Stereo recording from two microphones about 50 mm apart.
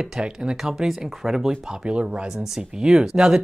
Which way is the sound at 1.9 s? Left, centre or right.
Right.